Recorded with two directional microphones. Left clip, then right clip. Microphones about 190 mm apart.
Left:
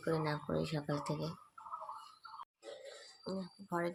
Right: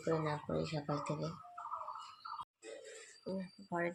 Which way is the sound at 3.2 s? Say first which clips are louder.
Even; 10° left (ahead or behind).